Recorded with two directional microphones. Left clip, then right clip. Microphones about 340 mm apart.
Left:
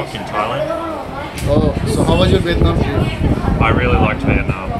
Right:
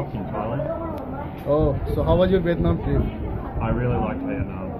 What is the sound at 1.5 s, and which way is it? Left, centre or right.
Speech, centre.